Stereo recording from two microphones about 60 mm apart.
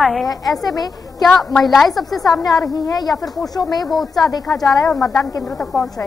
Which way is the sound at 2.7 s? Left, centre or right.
Left.